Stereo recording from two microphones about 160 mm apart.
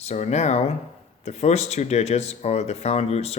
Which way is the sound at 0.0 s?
45° left (ahead or behind).